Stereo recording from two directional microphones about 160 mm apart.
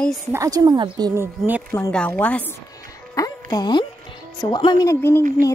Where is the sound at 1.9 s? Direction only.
10° left (ahead or behind).